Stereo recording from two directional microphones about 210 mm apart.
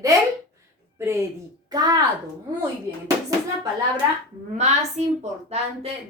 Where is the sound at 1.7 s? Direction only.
20° right (ahead or behind).